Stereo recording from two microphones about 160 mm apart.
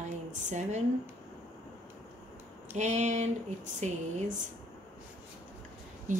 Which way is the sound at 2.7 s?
50° right (ahead or behind).